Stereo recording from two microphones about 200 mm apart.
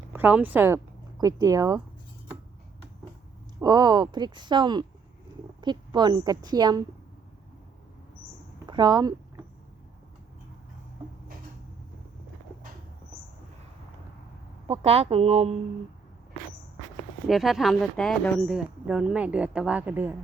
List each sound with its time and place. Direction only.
0.1 s speech: 10° right (ahead or behind)
3.6 s speech: 20° right (ahead or behind)
8.6 s speech: 20° right (ahead or behind)
14.7 s speech: 30° right (ahead or behind)
17.2 s speech: centre (ahead or behind)